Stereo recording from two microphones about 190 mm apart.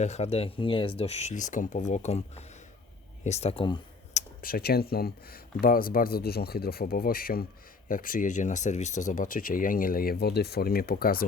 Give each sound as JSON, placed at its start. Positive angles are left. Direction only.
{"t": 0.0, "sound": "speech", "side_deg": 35}
{"t": 4.1, "sound": "speech", "side_deg": 50}